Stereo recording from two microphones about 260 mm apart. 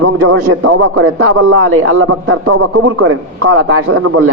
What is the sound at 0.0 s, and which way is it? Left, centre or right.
A man's voice, right.